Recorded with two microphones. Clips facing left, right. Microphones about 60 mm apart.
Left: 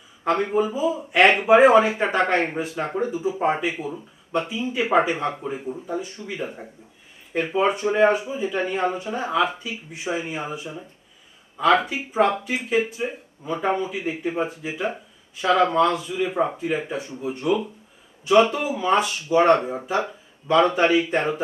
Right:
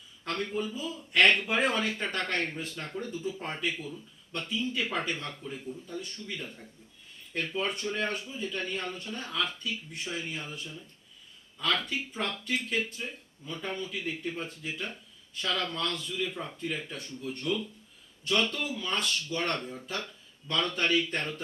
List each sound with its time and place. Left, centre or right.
0.3 s speech: left
5.4 s speech: left
5.8 s speech: centre
16.6 s speech: centre